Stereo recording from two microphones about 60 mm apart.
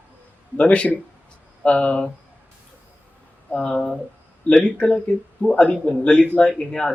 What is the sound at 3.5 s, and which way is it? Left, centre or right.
A man's voice, centre.